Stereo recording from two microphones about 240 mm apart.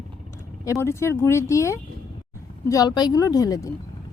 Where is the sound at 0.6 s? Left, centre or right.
Centre.